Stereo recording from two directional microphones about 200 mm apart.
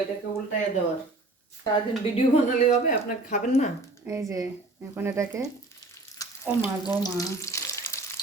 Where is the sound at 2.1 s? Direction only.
30° left (ahead or behind).